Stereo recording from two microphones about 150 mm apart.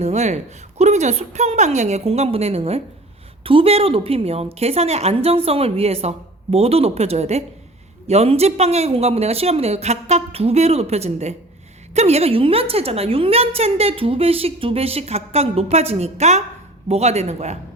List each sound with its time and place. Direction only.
0.0 s a woman's voice: 50° right (ahead or behind)